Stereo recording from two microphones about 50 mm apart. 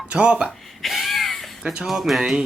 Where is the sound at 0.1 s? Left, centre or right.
Centre.